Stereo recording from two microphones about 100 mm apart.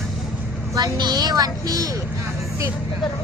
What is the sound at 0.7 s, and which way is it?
A woman's voice, 45° right (ahead or behind).